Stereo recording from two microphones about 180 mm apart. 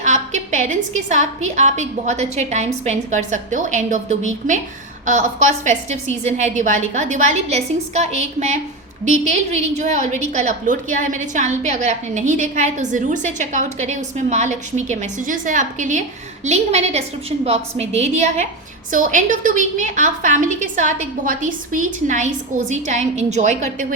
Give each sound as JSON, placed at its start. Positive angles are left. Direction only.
{"t": 0.0, "sound": "a woman's voice", "side_deg": -40}